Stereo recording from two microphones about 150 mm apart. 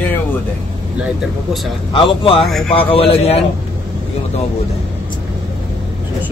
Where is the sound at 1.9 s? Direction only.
35° left (ahead or behind).